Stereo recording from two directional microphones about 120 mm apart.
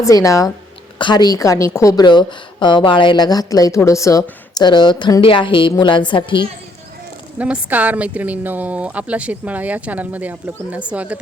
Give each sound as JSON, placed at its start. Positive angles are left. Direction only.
{"t": 0.0, "sound": "speech", "side_deg": 25}
{"t": 0.9, "sound": "a woman's voice", "side_deg": 40}
{"t": 4.5, "sound": "a woman's voice", "side_deg": 40}
{"t": 7.3, "sound": "a woman's voice", "side_deg": -10}